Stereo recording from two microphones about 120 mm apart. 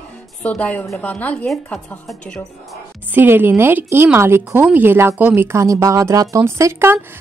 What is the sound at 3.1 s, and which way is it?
A woman's voice, 15° right (ahead or behind).